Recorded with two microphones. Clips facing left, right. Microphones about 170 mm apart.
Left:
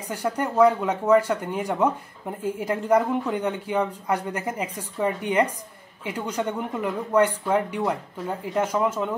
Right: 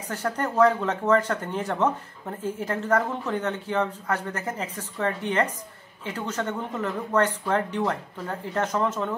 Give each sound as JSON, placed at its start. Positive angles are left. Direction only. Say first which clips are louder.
{"t": 0.1, "sound": "speech", "louder": "left 2 dB", "side_deg": 10}